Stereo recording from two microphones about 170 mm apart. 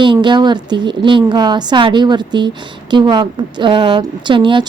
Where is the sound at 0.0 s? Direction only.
30° right (ahead or behind).